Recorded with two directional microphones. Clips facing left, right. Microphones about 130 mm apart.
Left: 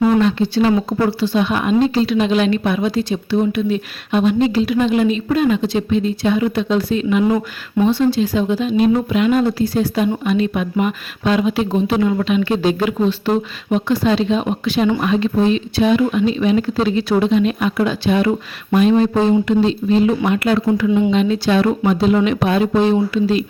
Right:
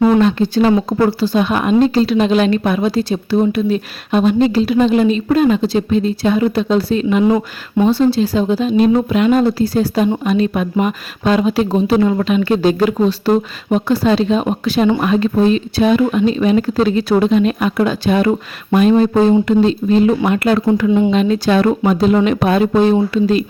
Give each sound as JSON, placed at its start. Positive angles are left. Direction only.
{"t": 0.2, "sound": "speech", "side_deg": -45}
{"t": 7.3, "sound": "speech", "side_deg": -25}